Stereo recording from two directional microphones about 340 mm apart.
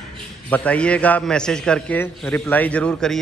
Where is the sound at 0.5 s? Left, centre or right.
Centre.